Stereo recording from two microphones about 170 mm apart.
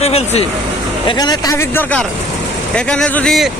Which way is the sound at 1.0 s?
25° left (ahead or behind).